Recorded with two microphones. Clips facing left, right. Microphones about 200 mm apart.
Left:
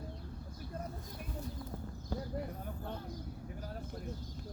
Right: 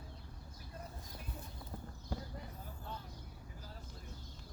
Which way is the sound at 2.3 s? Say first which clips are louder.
Left 9 dB; 60° left (ahead or behind).